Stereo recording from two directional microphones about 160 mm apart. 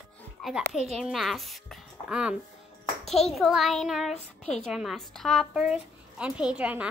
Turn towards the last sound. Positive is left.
turn(degrees=-10)  # may be behind; listen again after turning